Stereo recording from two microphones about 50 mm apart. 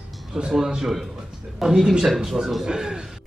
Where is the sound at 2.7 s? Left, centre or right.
Centre.